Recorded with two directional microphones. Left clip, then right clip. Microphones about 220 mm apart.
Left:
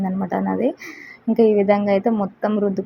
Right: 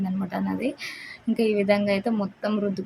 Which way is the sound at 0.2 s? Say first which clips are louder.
Left 9 dB; 15° left (ahead or behind).